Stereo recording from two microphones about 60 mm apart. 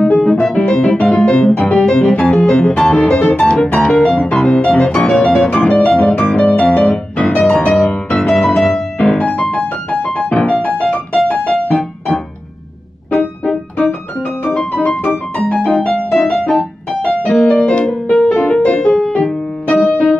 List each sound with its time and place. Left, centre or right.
0.0 s music: centre
1.5 s music: left
2.4 s piano: centre
2.9 s music: centre
3.6 s piano: centre
5.9 s music: centre
13.2 s music: centre
14.4 s music: centre
16.1 s music: centre
19.7 s music: left